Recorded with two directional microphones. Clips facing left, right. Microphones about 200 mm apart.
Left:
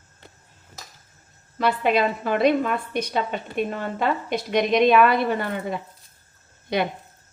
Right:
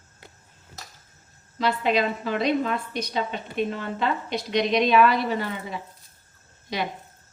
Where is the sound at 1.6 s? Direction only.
55° left (ahead or behind).